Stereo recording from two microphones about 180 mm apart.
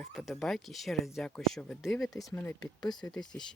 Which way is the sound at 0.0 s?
Centre (ahead or behind).